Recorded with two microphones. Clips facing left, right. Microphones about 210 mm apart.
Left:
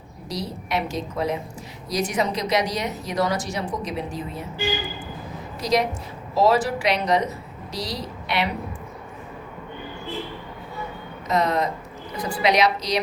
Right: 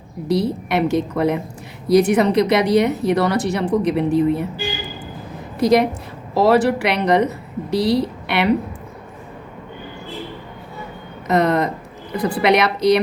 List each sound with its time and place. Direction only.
0.3 s speech: 60° right (ahead or behind)
5.5 s speech: 55° right (ahead or behind)
11.3 s speech: 60° right (ahead or behind)